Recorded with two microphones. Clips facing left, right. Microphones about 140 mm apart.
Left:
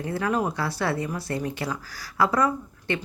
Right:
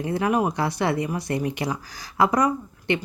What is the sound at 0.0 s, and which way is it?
Speech, 15° right (ahead or behind).